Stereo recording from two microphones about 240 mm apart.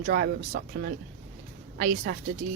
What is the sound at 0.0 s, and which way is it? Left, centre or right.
Speech, right.